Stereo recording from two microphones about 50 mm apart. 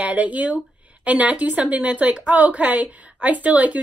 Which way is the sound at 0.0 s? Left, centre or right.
Right.